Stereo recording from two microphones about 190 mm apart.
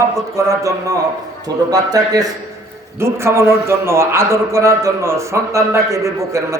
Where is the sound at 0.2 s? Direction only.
15° right (ahead or behind).